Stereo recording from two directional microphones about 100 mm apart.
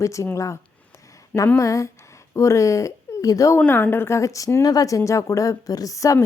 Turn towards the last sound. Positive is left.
turn(degrees=30)  # may be behind; listen again after turning